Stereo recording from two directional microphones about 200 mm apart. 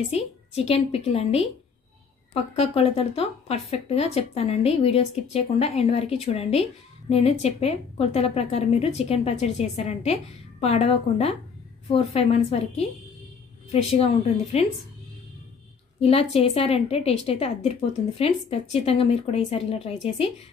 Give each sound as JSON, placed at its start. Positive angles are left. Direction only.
{"t": 0.1, "sound": "a woman's voice", "side_deg": 30}
{"t": 16.0, "sound": "a woman's voice", "side_deg": 30}